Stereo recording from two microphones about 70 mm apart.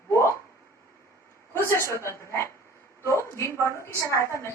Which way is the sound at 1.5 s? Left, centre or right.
Left.